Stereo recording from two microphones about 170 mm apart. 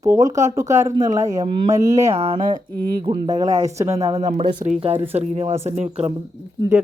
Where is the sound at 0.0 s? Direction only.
20° right (ahead or behind).